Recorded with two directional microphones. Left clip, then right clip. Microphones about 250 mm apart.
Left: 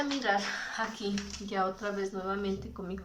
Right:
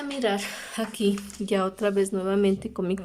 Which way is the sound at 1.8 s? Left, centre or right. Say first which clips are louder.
Right 9 dB; right.